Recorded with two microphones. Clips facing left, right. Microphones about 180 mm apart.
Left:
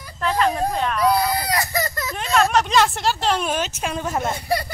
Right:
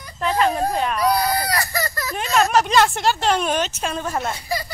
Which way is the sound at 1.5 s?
20° left (ahead or behind).